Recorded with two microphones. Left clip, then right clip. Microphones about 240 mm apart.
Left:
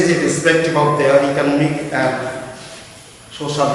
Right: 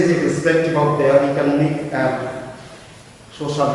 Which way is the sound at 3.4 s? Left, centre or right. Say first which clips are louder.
Left 1 dB; centre.